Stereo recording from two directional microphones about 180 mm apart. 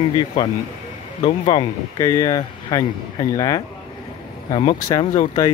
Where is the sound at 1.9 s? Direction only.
20° left (ahead or behind).